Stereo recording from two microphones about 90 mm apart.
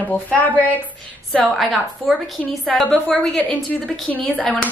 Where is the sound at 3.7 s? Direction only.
20° left (ahead or behind).